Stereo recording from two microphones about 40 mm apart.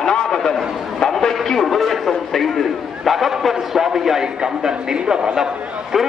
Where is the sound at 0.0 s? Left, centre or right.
Centre.